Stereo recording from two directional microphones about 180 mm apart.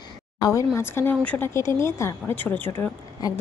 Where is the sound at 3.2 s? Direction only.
20° left (ahead or behind).